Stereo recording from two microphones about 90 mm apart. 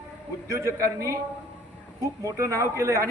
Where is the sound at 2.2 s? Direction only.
35° right (ahead or behind).